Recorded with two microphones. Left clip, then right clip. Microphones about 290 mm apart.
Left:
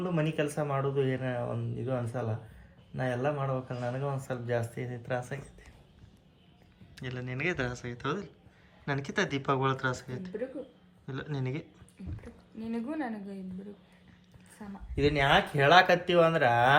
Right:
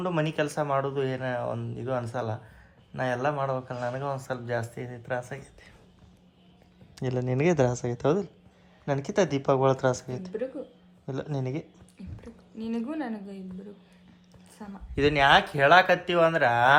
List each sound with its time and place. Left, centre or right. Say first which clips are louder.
0.3 s speech: right 5 dB; centre
6.9 s speech: right 10 dB; centre
11.0 s speech: right 5 dB; centre
12.6 s speech: right 3 dB; centre
14.6 s speech: right 3 dB; centre
14.9 s speech: right 4 dB; right
15.2 s speech: right 6 dB; centre